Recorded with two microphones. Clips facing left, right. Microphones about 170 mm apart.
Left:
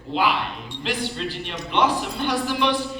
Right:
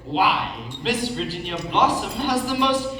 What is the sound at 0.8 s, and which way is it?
A man's voice, 40° right (ahead or behind).